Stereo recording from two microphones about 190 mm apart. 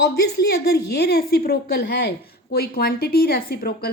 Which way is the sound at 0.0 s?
60° left (ahead or behind).